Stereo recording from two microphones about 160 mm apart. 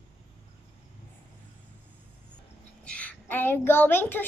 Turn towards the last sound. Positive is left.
turn(degrees=15)  # may be behind; listen again after turning